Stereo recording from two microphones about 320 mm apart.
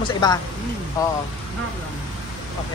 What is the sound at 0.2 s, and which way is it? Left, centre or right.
Speech, centre.